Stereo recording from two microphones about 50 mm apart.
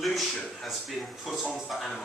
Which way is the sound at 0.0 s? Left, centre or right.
Centre.